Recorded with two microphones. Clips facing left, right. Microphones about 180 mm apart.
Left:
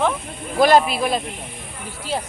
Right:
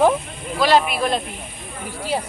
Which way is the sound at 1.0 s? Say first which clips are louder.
Even; 5° left (ahead or behind).